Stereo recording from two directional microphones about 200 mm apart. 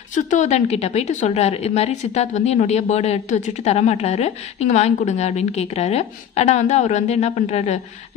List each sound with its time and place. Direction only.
0.1 s a woman's voice: 35° left (ahead or behind)